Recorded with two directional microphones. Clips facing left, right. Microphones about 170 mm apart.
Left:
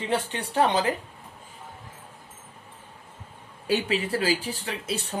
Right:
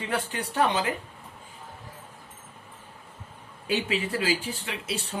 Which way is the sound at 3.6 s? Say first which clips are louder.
Left 2 dB; 35° left (ahead or behind).